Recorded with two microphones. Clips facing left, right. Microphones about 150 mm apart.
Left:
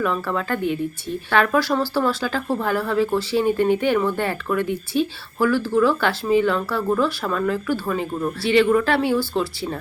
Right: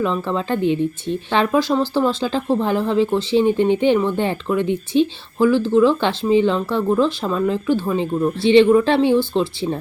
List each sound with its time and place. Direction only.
0.0 s speech: 25° right (ahead or behind)